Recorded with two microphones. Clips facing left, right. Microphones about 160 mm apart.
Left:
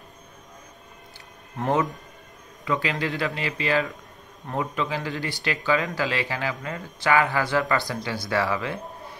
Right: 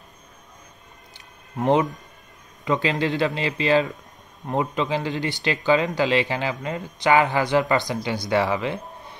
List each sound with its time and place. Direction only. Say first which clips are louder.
1.6 s speech: right 4 dB; 20° right (ahead or behind)